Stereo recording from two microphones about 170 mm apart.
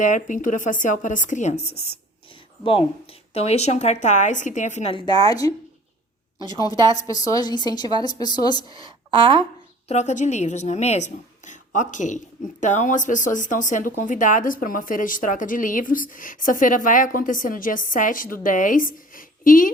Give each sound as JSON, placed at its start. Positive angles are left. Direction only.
{"t": 0.0, "sound": "a woman's voice", "side_deg": 50}
{"t": 7.1, "sound": "speech", "side_deg": 20}
{"t": 8.8, "sound": "a woman's voice", "side_deg": -30}
{"t": 9.9, "sound": "a woman's voice", "side_deg": 45}